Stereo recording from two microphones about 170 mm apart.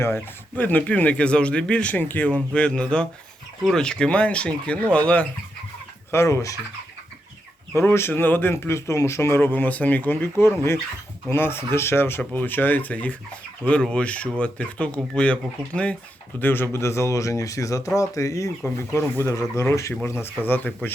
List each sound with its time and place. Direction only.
0.0 s speech: 10° left (ahead or behind)
7.8 s speech: 15° left (ahead or behind)